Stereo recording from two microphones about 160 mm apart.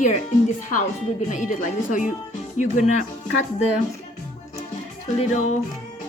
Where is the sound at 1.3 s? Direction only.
50° left (ahead or behind).